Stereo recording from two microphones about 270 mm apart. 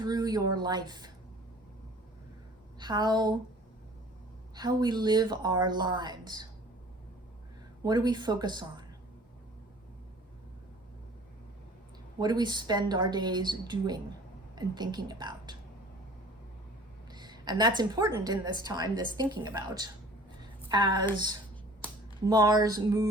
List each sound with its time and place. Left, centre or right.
0.0 s speech: centre
2.7 s a woman's voice: centre
4.5 s speech: centre
7.9 s speech: centre
12.2 s speech: centre
17.1 s a woman's voice: centre
22.2 s speech: centre